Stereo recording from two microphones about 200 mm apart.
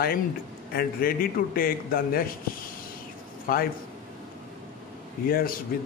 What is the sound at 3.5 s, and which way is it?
Speech, 45° left (ahead or behind).